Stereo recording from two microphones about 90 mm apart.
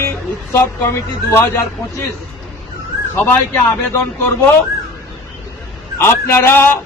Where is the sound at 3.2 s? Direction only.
20° left (ahead or behind).